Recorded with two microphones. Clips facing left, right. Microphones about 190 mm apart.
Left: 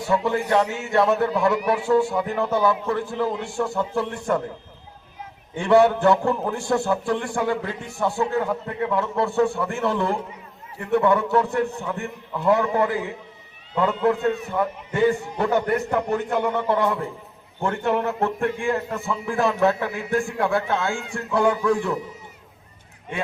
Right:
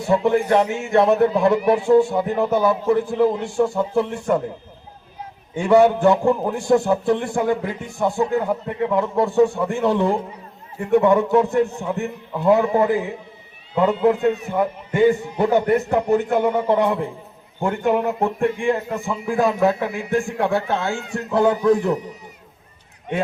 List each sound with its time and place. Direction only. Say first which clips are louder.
0.1 s a man's voice: right 4 dB; 25° right (ahead or behind)
5.5 s a man's voice: right 2 dB; 15° right (ahead or behind)
20.6 s a man's voice: right 1 dB; 30° right (ahead or behind)
20.8 s a man's voice: right 2 dB; 20° right (ahead or behind)